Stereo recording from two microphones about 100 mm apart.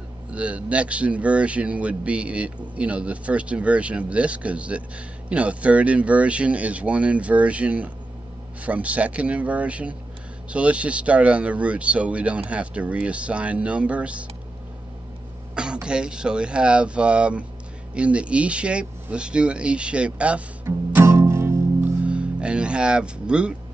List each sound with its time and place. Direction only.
0.3 s speech: 10° right (ahead or behind)
15.5 s speech: 10° right (ahead or behind)
20.6 s music: 25° right (ahead or behind)
22.0 s speech: 10° right (ahead or behind)